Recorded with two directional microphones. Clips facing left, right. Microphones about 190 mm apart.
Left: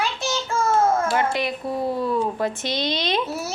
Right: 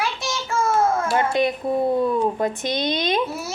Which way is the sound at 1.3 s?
20° right (ahead or behind).